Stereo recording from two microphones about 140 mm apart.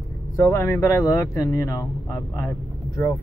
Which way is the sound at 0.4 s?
20° left (ahead or behind).